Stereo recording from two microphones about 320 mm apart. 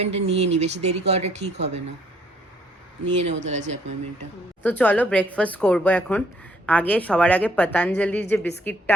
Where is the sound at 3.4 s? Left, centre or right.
Right.